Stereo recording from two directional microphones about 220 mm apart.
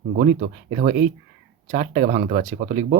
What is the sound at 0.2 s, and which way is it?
Speech, 30° right (ahead or behind).